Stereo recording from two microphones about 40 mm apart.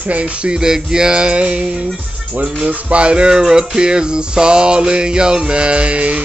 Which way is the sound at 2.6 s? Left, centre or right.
Right.